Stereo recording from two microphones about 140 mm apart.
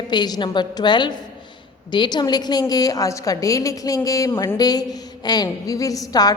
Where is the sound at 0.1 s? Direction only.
30° left (ahead or behind).